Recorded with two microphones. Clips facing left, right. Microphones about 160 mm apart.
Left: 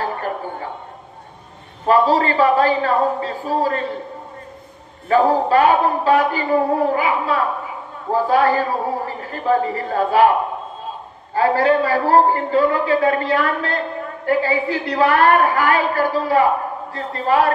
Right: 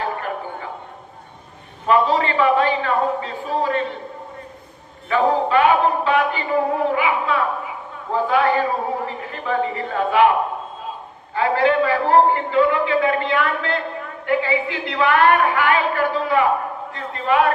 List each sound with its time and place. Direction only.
0.0 s a sound: 40° left (ahead or behind)
1.9 s a man's voice: 40° left (ahead or behind)
5.0 s a man's voice: 40° left (ahead or behind)
11.3 s a man's voice: 40° left (ahead or behind)